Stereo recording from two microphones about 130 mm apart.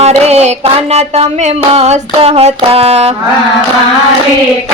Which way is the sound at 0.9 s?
55° right (ahead or behind).